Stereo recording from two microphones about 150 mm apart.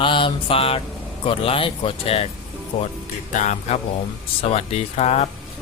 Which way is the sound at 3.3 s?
55° left (ahead or behind).